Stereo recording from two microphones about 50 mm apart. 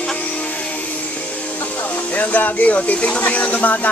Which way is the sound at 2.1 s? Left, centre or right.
Left.